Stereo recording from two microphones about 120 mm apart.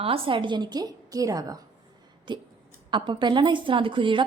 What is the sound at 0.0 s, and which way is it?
A woman's voice, 50° right (ahead or behind).